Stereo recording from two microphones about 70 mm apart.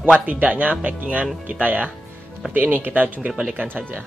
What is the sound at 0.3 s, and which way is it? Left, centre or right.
Speech, right.